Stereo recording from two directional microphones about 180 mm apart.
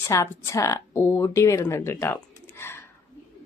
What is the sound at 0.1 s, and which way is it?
A woman's voice, 15° left (ahead or behind).